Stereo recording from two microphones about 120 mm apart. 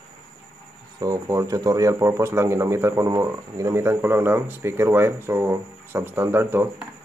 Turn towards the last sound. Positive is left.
turn(degrees=-20)  # may be behind; listen again after turning